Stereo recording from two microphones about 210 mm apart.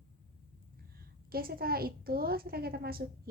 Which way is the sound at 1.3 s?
45° right (ahead or behind).